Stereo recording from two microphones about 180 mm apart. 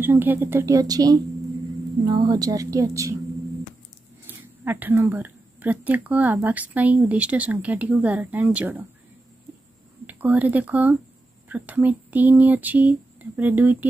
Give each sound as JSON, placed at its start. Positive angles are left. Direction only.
{"t": 0.0, "sound": "a woman's voice", "side_deg": -10}
{"t": 4.6, "sound": "speech", "side_deg": -10}
{"t": 10.0, "sound": "speech", "side_deg": -10}